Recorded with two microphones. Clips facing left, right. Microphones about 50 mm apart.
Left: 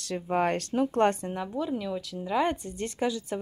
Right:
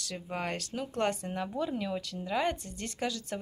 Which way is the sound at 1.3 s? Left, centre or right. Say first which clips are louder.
Left 2 dB; centre.